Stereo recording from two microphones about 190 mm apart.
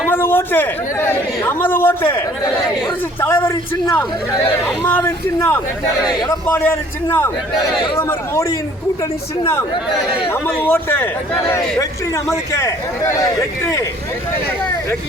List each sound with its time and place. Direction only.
0.1 s a man's voice: 10° left (ahead or behind)
10.2 s a man's voice: 10° left (ahead or behind)